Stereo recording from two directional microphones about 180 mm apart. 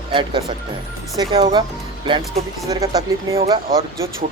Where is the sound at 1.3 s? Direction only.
25° right (ahead or behind).